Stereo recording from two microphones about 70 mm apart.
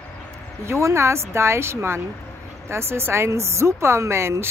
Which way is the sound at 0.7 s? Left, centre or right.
Right.